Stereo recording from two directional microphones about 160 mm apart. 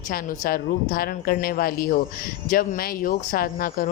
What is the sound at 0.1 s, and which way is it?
A man's voice, 65° left (ahead or behind).